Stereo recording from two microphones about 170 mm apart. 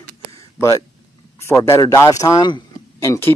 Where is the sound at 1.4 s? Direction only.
15° left (ahead or behind).